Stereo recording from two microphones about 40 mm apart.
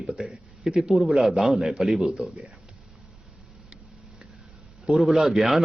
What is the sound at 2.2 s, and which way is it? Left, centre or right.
Speech, right.